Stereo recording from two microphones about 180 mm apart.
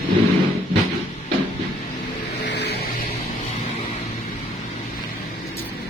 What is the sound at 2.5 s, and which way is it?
Vehicle, 70° left (ahead or behind).